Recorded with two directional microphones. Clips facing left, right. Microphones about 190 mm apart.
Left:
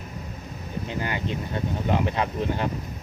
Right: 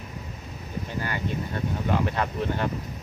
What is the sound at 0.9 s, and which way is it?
Speech, 20° left (ahead or behind).